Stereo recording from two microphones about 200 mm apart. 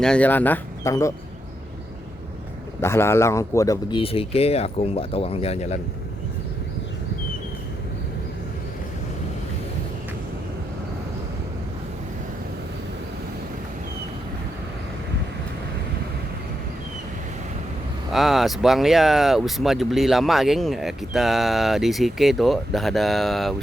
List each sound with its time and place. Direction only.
0.0 s speech: 5° left (ahead or behind)
2.8 s speech: 10° left (ahead or behind); by 5.8 s 35° left (ahead or behind)
18.1 s speech: centre (ahead or behind)